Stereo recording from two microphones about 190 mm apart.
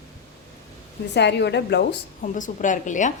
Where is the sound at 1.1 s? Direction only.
65° left (ahead or behind).